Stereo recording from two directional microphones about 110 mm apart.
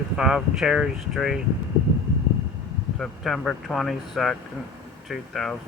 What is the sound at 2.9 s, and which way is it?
Speech, 5° left (ahead or behind).